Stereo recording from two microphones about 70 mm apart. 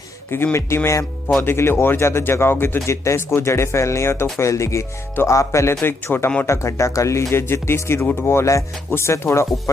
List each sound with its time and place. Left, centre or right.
0.3 s a man's voice: left
5.8 s a man's voice: left